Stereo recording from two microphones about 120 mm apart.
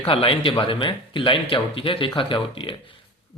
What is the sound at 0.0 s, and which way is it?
A man's voice, 50° left (ahead or behind).